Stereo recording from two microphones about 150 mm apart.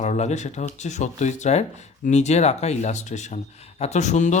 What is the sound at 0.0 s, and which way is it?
Speech, 50° left (ahead or behind).